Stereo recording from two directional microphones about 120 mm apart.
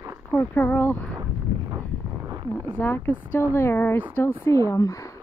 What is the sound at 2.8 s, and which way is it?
Speech, 15° left (ahead or behind).